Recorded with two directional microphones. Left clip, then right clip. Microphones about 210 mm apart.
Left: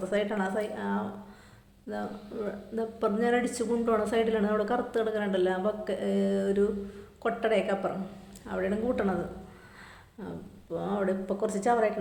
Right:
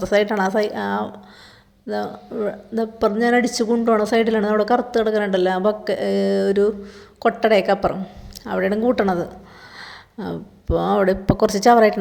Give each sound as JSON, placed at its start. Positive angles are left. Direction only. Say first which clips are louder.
{"t": 0.0, "sound": "speech", "louder": "right 11 dB", "side_deg": -45}